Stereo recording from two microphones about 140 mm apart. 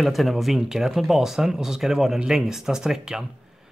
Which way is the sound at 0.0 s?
Centre (ahead or behind).